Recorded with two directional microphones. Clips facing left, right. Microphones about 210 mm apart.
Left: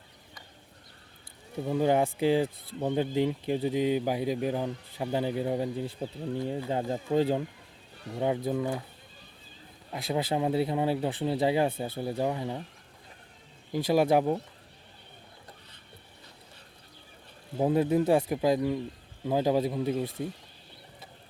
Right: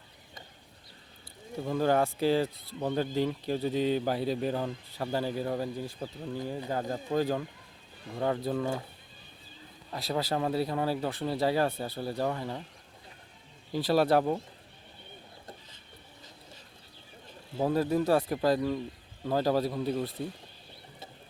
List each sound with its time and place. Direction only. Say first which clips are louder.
1.6 s a man's voice: left 1 dB; 15° left (ahead or behind)
8.4 s a man's voice: left 1 dB; 15° left (ahead or behind)
9.9 s a man's voice: left 2 dB; 20° left (ahead or behind)
13.7 s a man's voice: left 1 dB; 15° left (ahead or behind)
17.6 s a man's voice: left 2 dB; 20° left (ahead or behind)